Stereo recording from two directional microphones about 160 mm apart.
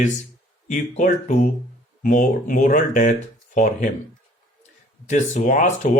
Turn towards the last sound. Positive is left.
turn(degrees=50)  # may be behind; listen again after turning